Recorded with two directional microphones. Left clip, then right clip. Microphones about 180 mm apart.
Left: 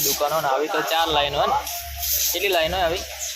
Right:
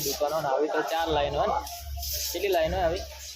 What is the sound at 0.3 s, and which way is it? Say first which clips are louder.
Speech: left 4 dB; 15° left (ahead or behind).